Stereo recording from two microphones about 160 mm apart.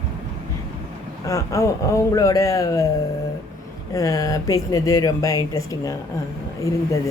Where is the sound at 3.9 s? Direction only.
20° left (ahead or behind).